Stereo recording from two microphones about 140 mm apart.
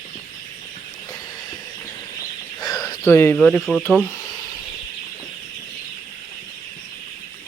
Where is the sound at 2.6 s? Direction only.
30° left (ahead or behind).